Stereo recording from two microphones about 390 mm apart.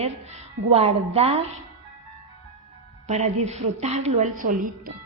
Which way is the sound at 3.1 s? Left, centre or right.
Centre.